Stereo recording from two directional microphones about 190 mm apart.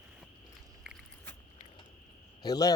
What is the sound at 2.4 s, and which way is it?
Speech, 20° left (ahead or behind).